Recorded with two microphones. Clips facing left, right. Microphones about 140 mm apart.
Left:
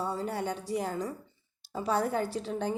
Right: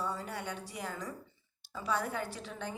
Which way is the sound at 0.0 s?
30° left (ahead or behind).